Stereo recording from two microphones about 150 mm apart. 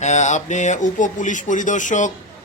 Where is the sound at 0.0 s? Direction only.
50° left (ahead or behind).